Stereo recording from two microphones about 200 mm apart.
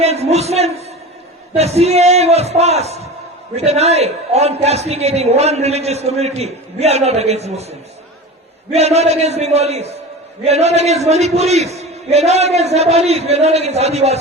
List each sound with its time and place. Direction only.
0.0 s a man's voice: 30° right (ahead or behind)